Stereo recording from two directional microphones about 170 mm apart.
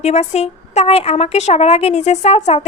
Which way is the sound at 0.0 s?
40° left (ahead or behind).